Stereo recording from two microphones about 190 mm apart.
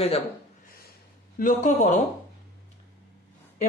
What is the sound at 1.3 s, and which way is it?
Speech, 45° left (ahead or behind).